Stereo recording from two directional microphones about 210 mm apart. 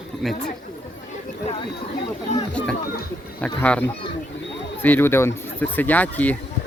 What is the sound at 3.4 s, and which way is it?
Speech, 5° left (ahead or behind).